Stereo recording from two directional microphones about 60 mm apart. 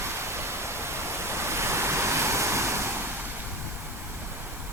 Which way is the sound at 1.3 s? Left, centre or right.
Right.